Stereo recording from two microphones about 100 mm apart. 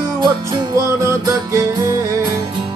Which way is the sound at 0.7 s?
30° right (ahead or behind).